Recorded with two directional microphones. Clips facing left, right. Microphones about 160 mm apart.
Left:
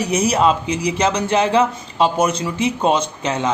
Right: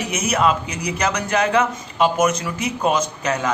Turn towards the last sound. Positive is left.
turn(degrees=25)  # may be behind; listen again after turning